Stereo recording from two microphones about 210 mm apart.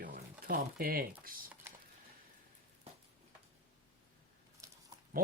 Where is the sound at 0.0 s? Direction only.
40° right (ahead or behind).